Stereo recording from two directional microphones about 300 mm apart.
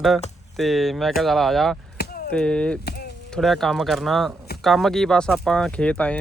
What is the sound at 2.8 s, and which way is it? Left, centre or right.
Speech, left.